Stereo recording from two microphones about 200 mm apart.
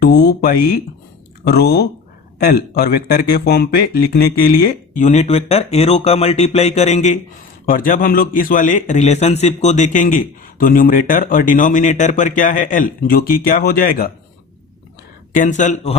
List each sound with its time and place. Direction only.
0.0 s a sound: 50° left (ahead or behind)
1.5 s a man's voice: 55° left (ahead or behind)
15.3 s speech: 40° left (ahead or behind)